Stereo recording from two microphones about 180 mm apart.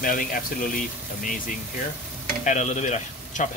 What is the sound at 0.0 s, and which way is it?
Speech, 50° left (ahead or behind).